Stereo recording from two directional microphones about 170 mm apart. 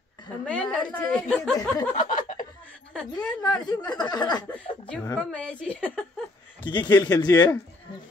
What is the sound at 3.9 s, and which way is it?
Speech, 25° left (ahead or behind).